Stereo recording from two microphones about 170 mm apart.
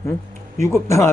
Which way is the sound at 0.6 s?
15° left (ahead or behind).